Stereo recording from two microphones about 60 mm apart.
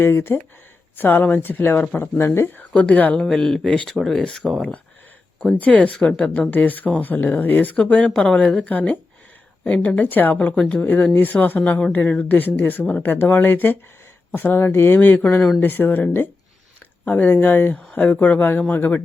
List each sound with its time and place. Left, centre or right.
0.0 s speech: left
0.9 s speech: left
2.7 s speech: left
3.2 s speech: centre
5.8 s speech: centre
8.1 s speech: centre; by 10.3 s left
10.5 s speech: centre